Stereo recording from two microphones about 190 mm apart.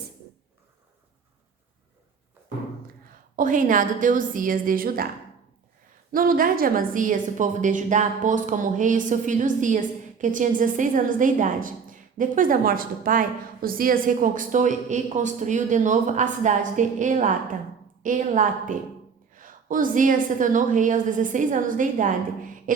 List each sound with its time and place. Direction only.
3.3 s a woman's voice: 45° right (ahead or behind)
6.1 s a woman's voice: 50° right (ahead or behind)